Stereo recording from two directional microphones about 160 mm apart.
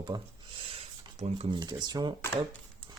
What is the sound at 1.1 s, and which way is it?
Speech, 40° right (ahead or behind).